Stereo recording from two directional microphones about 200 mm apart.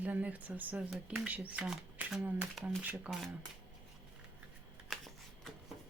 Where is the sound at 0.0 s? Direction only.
10° right (ahead or behind).